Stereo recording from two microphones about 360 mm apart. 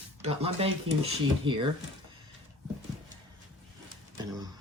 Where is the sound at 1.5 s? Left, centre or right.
Centre.